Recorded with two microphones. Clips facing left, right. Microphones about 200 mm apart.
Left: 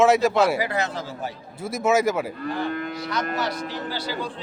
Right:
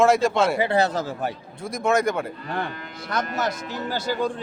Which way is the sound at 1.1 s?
55° right (ahead or behind).